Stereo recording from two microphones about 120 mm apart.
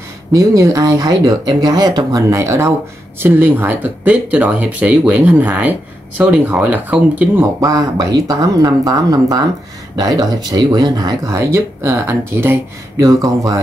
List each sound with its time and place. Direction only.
0.3 s speech: 30° right (ahead or behind)
7.6 s speech: 30° right (ahead or behind)